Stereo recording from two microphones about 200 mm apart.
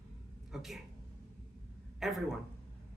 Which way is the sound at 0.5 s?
Centre (ahead or behind).